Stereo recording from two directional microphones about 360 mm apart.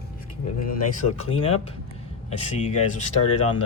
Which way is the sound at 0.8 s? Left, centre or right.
Centre.